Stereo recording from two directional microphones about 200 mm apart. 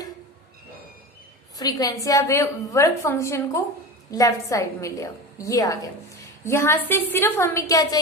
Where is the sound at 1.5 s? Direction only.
20° left (ahead or behind).